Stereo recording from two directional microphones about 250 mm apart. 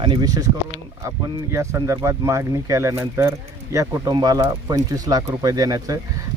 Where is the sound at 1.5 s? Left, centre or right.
Centre.